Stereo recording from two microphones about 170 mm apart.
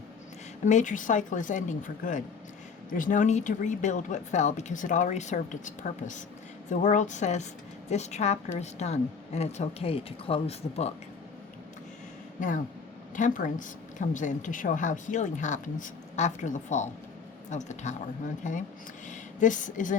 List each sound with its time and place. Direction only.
0.6 s a woman's voice: 45° left (ahead or behind)
12.4 s speech: 50° left (ahead or behind)
19.0 s speech: 50° left (ahead or behind)